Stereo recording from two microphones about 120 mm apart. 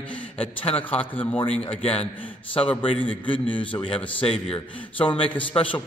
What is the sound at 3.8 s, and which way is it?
A man's voice, 50° left (ahead or behind).